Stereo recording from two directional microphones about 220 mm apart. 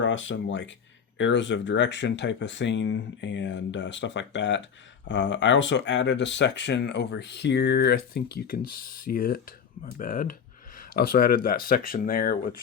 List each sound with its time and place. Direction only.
0.0 s speech: 60° left (ahead or behind); by 12.5 s 40° left (ahead or behind)